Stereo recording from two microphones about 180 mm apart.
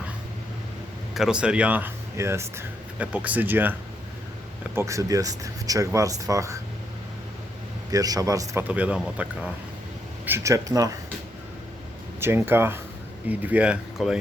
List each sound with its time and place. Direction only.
1.1 s speech: 5° right (ahead or behind)
7.9 s a man's voice: 20° right (ahead or behind)
10.2 s speech: 15° right (ahead or behind)
12.2 s speech: 10° right (ahead or behind)